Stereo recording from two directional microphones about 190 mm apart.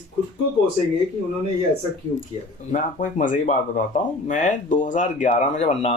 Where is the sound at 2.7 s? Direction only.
40° left (ahead or behind).